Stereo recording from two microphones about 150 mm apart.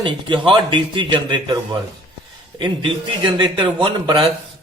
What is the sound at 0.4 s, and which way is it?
A man's voice, 30° right (ahead or behind).